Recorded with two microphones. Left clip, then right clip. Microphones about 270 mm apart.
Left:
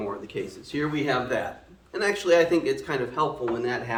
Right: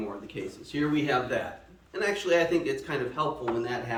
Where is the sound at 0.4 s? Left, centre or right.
Centre.